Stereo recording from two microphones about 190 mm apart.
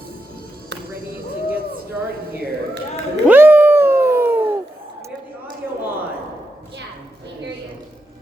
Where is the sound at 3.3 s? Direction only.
10° right (ahead or behind).